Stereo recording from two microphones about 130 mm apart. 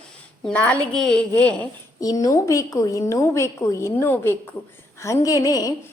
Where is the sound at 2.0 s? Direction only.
25° left (ahead or behind).